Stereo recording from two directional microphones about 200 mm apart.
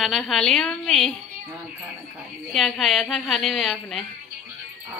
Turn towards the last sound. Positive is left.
turn(degrees=0)  # may be behind; listen again after turning